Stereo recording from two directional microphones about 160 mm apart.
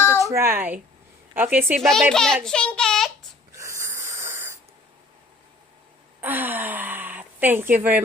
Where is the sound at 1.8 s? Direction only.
Centre (ahead or behind).